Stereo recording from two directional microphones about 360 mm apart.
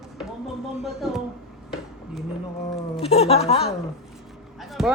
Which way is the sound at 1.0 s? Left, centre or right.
Centre.